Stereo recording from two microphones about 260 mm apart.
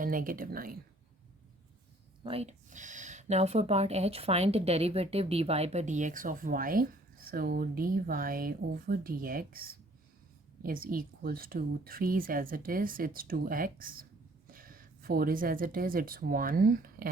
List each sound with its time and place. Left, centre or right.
0.0 s speech: right
2.2 s speech: right